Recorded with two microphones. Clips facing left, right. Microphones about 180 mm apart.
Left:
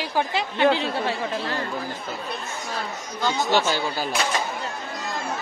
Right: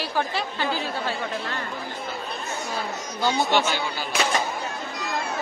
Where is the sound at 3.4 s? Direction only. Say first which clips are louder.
Left 1 dB; 40° left (ahead or behind).